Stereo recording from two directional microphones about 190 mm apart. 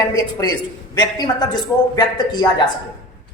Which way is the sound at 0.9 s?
20° left (ahead or behind).